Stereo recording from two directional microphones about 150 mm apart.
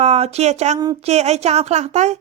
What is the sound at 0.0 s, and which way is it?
A woman's voice, 45° right (ahead or behind).